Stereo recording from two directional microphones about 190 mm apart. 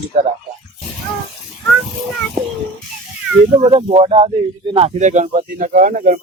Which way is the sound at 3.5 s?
30° right (ahead or behind).